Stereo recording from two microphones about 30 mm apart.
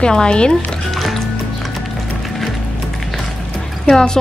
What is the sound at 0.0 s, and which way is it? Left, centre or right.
Speech, left.